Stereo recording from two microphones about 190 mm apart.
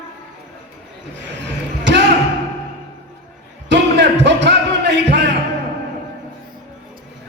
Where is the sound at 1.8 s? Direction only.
65° right (ahead or behind).